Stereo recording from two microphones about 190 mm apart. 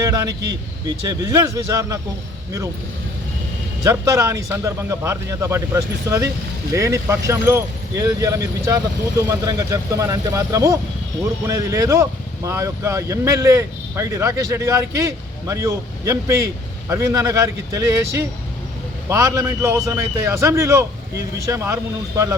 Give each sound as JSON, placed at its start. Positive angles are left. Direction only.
{"t": 0.0, "sound": "vehicle", "side_deg": -20}
{"t": 1.0, "sound": "speech", "side_deg": -20}
{"t": 3.8, "sound": "speech", "side_deg": -15}